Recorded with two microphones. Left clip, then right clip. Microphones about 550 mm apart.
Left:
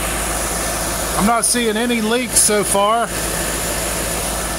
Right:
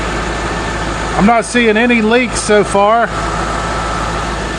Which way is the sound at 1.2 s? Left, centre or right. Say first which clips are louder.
Right 7 dB; left.